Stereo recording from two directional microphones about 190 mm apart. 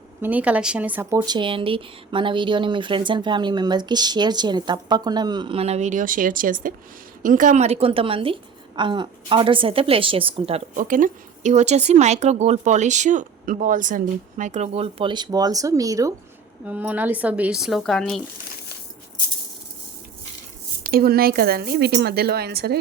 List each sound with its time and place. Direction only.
0.2 s speech: 10° right (ahead or behind)
1.2 s speech: 25° right (ahead or behind)
10.8 s speech: 45° right (ahead or behind); by 18.2 s 5° left (ahead or behind)
20.8 s speech: 55° right (ahead or behind)